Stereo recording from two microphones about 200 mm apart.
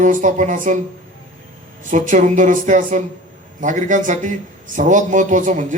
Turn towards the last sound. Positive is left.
turn(degrees=-40)  # may be behind; listen again after turning